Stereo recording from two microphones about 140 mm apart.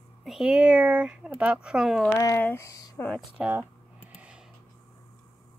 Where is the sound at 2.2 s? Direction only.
15° left (ahead or behind).